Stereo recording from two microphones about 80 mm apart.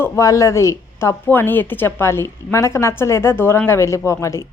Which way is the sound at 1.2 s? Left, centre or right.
Left.